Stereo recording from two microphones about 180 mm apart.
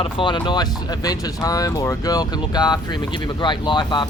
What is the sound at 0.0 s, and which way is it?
Speech, 30° left (ahead or behind).